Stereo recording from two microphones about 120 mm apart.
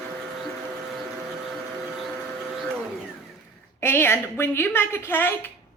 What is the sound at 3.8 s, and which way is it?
A woman's voice, 20° left (ahead or behind).